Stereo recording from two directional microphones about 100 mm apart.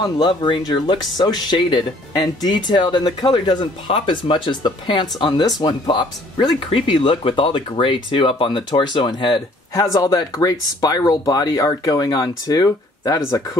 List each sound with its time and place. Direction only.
0.0 s speech: 50° left (ahead or behind)
3.8 s speech: 60° left (ahead or behind)
9.8 s speech: 40° left (ahead or behind)